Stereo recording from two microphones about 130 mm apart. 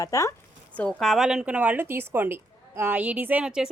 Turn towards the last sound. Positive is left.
turn(degrees=-10)  # may be behind; listen again after turning